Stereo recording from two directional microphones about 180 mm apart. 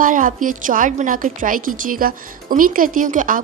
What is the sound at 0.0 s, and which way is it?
A woman's voice, 45° right (ahead or behind).